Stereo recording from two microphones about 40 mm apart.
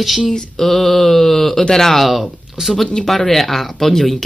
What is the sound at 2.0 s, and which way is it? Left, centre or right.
Speech, centre.